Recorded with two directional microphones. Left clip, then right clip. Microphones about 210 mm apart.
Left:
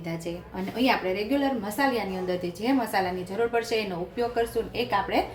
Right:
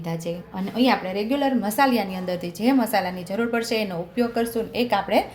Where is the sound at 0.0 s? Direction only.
40° right (ahead or behind).